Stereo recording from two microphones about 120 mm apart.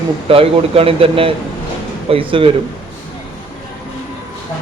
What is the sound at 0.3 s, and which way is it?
Speech, 55° right (ahead or behind).